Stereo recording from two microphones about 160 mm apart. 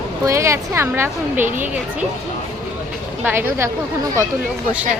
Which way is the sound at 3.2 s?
15° right (ahead or behind).